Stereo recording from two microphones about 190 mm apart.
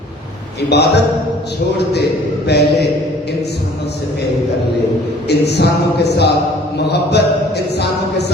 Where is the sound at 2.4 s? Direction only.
60° left (ahead or behind).